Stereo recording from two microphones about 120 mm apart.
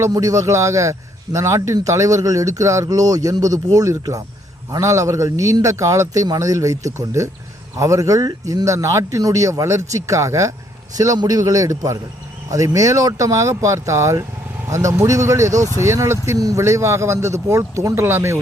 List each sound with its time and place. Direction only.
0.0 s a man's voice: 30° right (ahead or behind)